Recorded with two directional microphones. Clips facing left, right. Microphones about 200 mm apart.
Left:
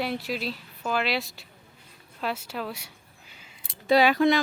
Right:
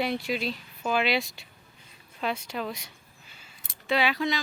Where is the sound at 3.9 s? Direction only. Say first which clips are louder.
Left 7 dB; 40° left (ahead or behind).